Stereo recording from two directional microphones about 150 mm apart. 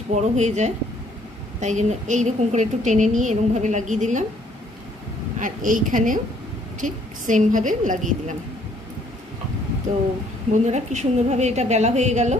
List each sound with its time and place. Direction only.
0.1 s a woman's voice: 50° right (ahead or behind)
5.4 s a woman's voice: 60° right (ahead or behind)
10.6 s a woman's voice: 50° right (ahead or behind)